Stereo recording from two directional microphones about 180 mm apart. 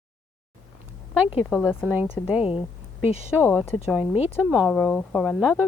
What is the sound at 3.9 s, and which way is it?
Speech, 5° right (ahead or behind).